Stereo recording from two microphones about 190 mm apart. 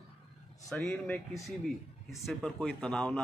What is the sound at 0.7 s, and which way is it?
Speech, centre (ahead or behind).